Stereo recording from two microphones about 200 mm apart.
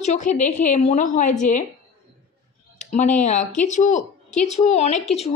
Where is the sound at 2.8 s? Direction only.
35° left (ahead or behind).